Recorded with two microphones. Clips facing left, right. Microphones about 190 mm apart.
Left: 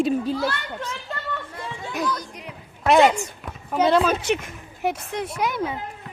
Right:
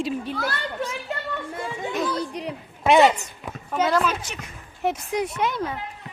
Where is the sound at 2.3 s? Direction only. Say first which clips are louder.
Right 8 dB; 35° right (ahead or behind).